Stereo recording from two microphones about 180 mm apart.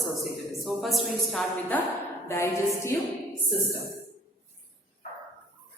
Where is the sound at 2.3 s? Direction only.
15° left (ahead or behind).